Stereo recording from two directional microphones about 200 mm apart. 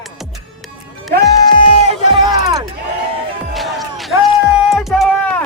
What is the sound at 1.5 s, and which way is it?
Music, 30° left (ahead or behind).